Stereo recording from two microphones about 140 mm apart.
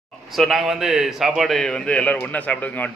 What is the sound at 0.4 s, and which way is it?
A man's voice, centre (ahead or behind).